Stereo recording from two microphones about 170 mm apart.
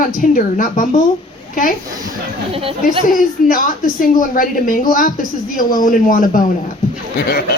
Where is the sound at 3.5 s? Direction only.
55° left (ahead or behind).